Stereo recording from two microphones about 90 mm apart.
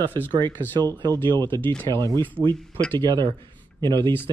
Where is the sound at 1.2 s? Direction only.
60° right (ahead or behind).